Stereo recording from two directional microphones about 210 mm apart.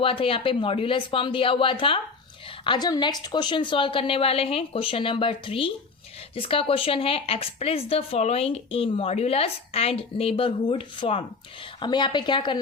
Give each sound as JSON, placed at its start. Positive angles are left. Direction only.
{"t": 0.0, "sound": "speech", "side_deg": 25}